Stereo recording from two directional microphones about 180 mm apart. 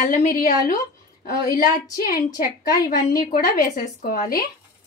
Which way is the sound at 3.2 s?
50° left (ahead or behind).